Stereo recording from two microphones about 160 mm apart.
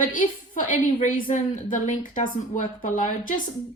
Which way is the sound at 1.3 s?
45° left (ahead or behind).